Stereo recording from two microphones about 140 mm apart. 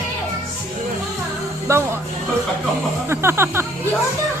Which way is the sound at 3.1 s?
20° right (ahead or behind).